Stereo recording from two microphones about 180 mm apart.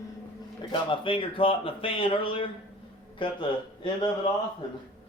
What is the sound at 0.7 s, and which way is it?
Speech, 30° left (ahead or behind).